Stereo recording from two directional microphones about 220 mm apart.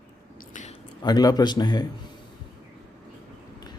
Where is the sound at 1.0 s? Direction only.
20° left (ahead or behind).